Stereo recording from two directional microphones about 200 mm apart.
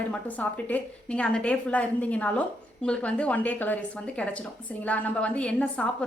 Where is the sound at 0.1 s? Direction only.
5° left (ahead or behind).